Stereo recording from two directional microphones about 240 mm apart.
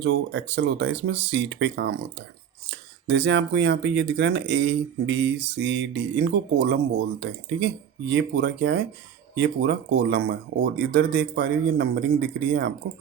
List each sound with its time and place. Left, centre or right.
0.0 s speech: right